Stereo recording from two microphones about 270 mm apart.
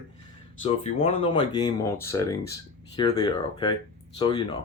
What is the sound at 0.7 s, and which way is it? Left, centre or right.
Speech, left.